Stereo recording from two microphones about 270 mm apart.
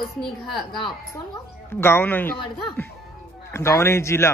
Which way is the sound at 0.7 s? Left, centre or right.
Centre.